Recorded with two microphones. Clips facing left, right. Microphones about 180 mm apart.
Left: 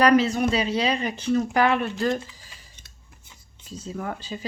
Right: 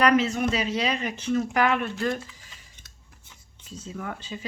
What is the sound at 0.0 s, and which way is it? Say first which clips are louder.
Speech: left 3 dB; 35° left (ahead or behind).